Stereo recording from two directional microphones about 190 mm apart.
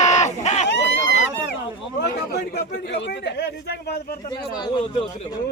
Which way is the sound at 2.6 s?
60° left (ahead or behind).